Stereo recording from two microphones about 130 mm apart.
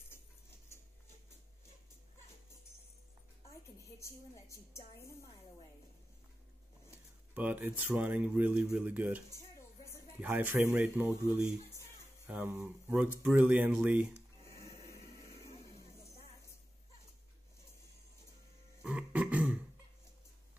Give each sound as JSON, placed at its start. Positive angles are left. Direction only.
{"t": 4.0, "sound": "a woman's voice", "side_deg": 20}
{"t": 7.3, "sound": "speech", "side_deg": -15}
{"t": 10.2, "sound": "speech", "side_deg": -15}
{"t": 12.3, "sound": "speech", "side_deg": -15}
{"t": 15.7, "sound": "a sound", "side_deg": 55}
{"t": 18.9, "sound": "a sound", "side_deg": -10}